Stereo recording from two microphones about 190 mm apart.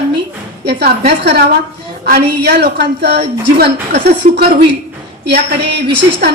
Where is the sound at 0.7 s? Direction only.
60° right (ahead or behind).